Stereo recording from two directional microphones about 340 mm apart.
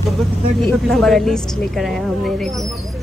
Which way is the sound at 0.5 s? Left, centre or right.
Centre.